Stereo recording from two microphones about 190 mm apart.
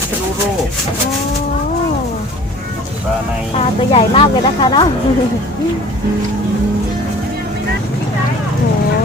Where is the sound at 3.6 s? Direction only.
30° left (ahead or behind).